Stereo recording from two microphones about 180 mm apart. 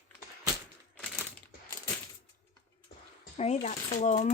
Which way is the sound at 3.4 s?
40° left (ahead or behind).